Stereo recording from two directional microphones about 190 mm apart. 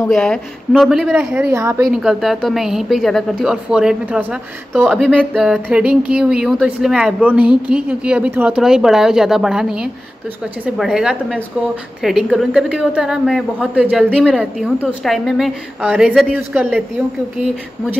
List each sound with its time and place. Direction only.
0.1 s a woman's voice: 5° left (ahead or behind); by 1.9 s 15° right (ahead or behind)
1.9 s a woman's voice: 5° right (ahead or behind)